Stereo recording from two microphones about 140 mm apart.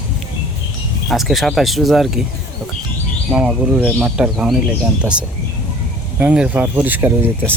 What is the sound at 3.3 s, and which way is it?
Speech, 5° right (ahead or behind).